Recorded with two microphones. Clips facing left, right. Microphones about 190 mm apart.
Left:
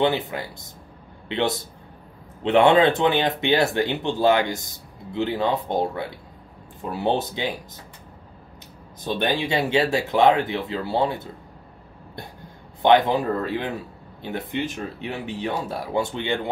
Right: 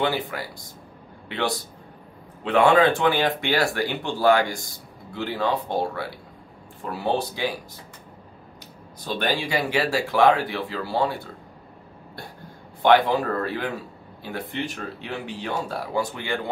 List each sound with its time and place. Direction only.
0.0 s speech: 20° left (ahead or behind)
9.0 s speech: 20° left (ahead or behind)
12.8 s speech: 20° left (ahead or behind)